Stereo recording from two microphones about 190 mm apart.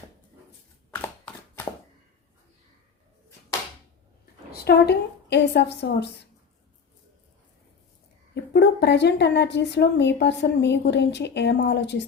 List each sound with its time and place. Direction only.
0.9 s a sound: 10° left (ahead or behind)
4.6 s speech: 60° left (ahead or behind)
8.5 s speech: 65° left (ahead or behind)